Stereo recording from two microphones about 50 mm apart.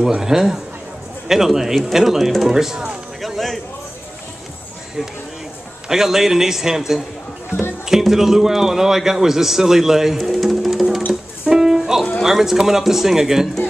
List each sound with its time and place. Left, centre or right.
0.0 s a man's voice: centre
3.2 s a sound: centre
5.9 s a man's voice: centre
11.4 s music: centre
12.2 s a man's voice: centre